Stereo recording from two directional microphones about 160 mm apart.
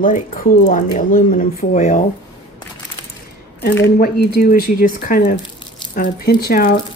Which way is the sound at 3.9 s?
70° left (ahead or behind).